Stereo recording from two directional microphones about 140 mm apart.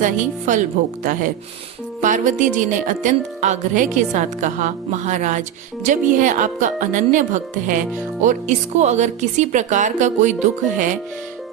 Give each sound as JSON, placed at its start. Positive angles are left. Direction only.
{"t": 0.0, "sound": "speech", "side_deg": -65}